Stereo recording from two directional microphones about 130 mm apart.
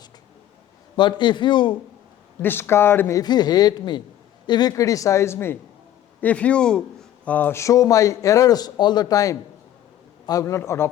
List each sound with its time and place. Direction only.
0.9 s speech: 35° left (ahead or behind)
2.4 s speech: 15° left (ahead or behind)
3.2 s a woman's voice: 30° left (ahead or behind)